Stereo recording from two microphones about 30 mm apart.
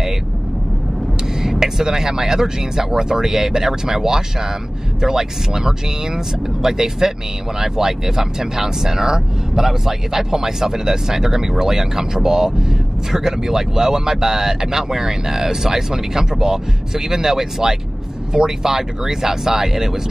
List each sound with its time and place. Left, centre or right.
1.4 s speech: centre